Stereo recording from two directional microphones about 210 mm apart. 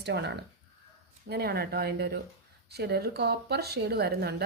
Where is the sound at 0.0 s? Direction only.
55° right (ahead or behind).